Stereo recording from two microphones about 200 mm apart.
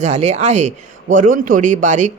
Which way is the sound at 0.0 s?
35° right (ahead or behind).